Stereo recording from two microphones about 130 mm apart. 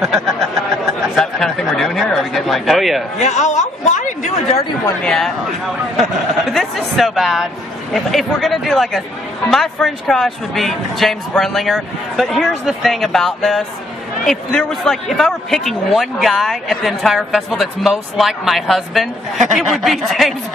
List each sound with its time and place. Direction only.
0.0 s a sound: centre (ahead or behind)
1.1 s a man's voice: centre (ahead or behind)
3.2 s chatter: 65° left (ahead or behind)
5.0 s a man's voice: 5° left (ahead or behind)